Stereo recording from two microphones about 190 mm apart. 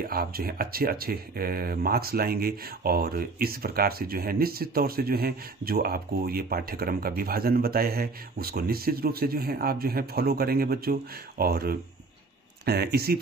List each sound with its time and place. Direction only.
0.0 s speech: 50° right (ahead or behind)